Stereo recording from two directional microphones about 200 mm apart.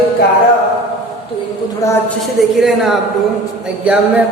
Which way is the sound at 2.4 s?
Centre (ahead or behind).